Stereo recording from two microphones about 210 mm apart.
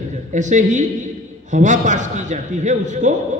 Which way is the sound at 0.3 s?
35° right (ahead or behind).